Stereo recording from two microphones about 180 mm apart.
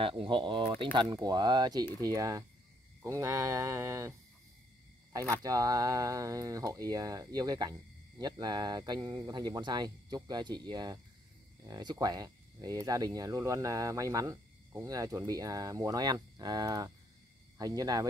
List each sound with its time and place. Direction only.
0.0 s speech: 30° right (ahead or behind)
5.1 s speech: 15° right (ahead or behind)